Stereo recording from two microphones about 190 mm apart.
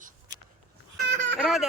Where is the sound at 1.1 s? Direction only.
75° right (ahead or behind).